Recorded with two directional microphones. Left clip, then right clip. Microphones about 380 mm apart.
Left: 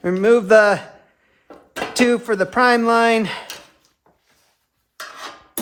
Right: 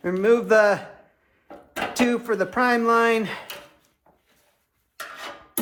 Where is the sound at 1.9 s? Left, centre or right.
Left.